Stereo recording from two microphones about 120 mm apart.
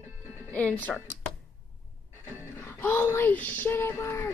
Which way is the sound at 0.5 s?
10° left (ahead or behind).